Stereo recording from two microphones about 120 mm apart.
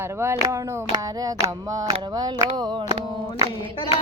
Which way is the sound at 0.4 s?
30° right (ahead or behind).